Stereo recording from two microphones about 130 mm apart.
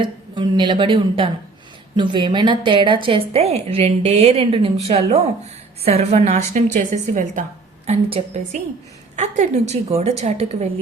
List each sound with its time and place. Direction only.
0.0 s a woman's voice: 35° right (ahead or behind); by 6.6 s 60° right (ahead or behind)
6.7 s a woman's voice: 80° right
7.9 s a woman's voice: 55° right (ahead or behind)
9.1 s a woman's voice: 65° right (ahead or behind)